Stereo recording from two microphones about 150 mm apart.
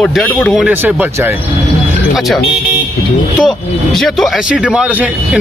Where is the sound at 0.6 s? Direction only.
10° right (ahead or behind).